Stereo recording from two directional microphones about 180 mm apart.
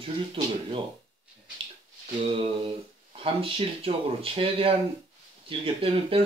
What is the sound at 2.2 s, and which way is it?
Speech, 35° right (ahead or behind).